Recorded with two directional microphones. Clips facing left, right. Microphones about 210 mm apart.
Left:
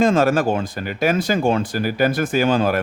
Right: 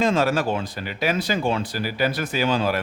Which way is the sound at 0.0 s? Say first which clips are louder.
Left 5 dB; 50° left (ahead or behind).